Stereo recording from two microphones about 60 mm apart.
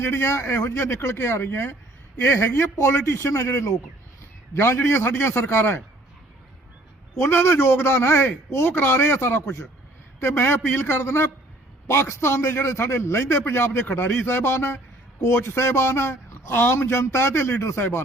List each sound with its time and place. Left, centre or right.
0.0 s a man's voice: left
7.2 s a man's voice: left
8.6 s a man's voice: left